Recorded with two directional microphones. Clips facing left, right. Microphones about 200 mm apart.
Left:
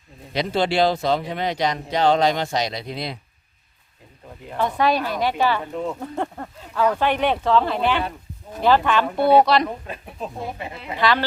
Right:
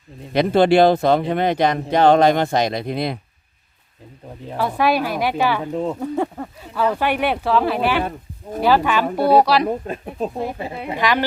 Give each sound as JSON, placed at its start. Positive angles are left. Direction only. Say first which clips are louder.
{"t": 0.3, "sound": "speech", "louder": "right 7 dB", "side_deg": -55}
{"t": 4.5, "sound": "a woman's voice", "louder": "right 2 dB", "side_deg": -10}
{"t": 5.7, "sound": "speech", "louder": "right 4 dB", "side_deg": -35}
{"t": 6.0, "sound": "a woman's voice", "louder": "right 5 dB", "side_deg": -5}
{"t": 9.6, "sound": "speech", "louder": "right 8 dB", "side_deg": -40}
{"t": 10.9, "sound": "a woman's voice", "louder": "even", "side_deg": -15}